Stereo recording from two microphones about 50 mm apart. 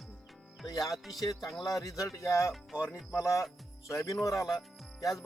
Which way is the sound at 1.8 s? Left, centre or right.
Left.